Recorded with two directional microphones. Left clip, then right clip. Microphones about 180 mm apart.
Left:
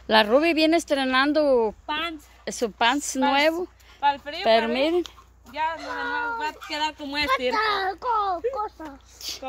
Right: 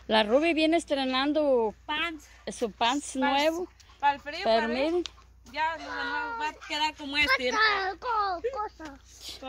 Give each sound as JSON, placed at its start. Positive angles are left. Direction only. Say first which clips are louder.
{"t": 0.0, "sound": "speech", "louder": "left 5 dB", "side_deg": 0}
{"t": 6.7, "sound": "speech", "louder": "even", "side_deg": -25}
{"t": 7.2, "sound": "a child's voice", "louder": "left 2 dB", "side_deg": 15}